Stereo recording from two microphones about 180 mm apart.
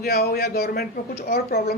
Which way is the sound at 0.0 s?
60° left (ahead or behind).